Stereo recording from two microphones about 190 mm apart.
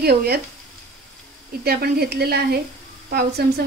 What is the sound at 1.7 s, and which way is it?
Speech, 55° right (ahead or behind).